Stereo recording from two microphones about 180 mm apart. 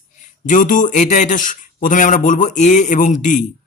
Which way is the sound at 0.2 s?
45° left (ahead or behind).